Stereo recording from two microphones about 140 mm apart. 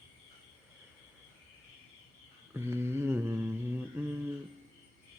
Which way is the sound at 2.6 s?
15° right (ahead or behind).